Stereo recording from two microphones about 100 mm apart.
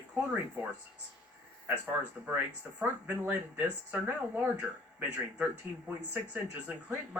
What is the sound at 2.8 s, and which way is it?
Speech, 20° right (ahead or behind).